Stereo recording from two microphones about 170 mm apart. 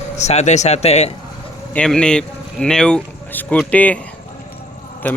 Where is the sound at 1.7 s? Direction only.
5° left (ahead or behind).